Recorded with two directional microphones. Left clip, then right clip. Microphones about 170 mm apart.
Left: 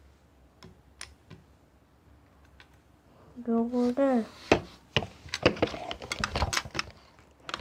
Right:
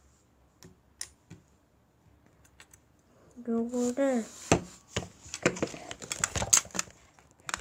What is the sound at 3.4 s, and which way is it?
Speech, 5° right (ahead or behind).